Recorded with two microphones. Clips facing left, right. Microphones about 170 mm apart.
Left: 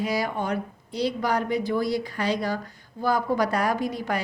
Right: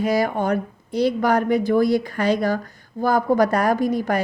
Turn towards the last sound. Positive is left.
turn(degrees=-45)  # may be behind; listen again after turning